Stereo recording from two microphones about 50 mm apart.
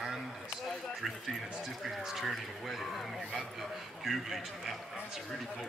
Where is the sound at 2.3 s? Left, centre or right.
Centre.